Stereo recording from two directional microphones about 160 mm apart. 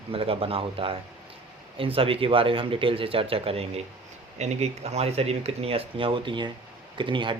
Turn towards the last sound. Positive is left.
turn(degrees=-30)  # may be behind; listen again after turning